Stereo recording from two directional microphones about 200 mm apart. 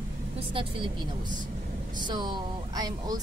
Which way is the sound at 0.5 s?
25° right (ahead or behind).